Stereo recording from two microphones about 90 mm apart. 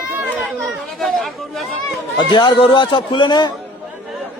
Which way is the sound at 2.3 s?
60° left (ahead or behind).